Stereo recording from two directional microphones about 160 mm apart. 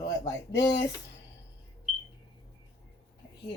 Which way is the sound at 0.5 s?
90° left.